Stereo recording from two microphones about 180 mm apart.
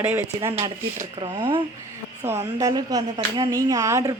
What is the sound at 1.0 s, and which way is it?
Speech, 30° right (ahead or behind).